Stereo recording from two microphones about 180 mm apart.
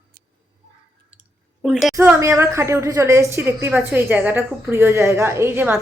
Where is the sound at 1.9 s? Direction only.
15° right (ahead or behind).